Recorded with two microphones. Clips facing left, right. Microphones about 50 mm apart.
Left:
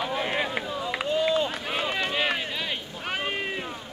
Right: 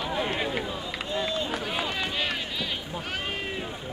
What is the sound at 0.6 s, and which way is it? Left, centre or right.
Run, centre.